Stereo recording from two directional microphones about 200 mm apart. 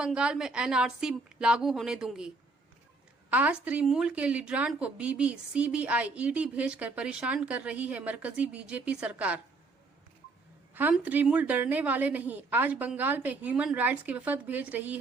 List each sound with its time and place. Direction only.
0.0 s a woman's voice: 5° right (ahead or behind)
10.8 s speech: 10° right (ahead or behind)